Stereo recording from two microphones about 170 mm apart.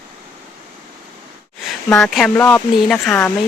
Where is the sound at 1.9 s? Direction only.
5° left (ahead or behind).